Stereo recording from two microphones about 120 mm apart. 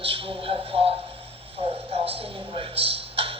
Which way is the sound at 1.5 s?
55° right (ahead or behind).